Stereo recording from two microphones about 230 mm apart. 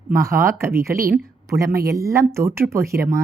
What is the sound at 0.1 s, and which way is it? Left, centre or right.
A woman's voice, centre.